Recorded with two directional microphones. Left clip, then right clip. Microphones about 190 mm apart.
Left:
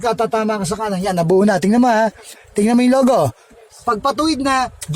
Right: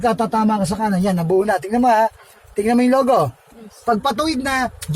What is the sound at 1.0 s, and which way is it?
Speech, 50° left (ahead or behind).